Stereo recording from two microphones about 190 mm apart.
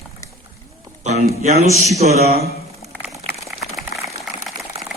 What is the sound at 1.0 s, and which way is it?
A man's voice, 35° right (ahead or behind).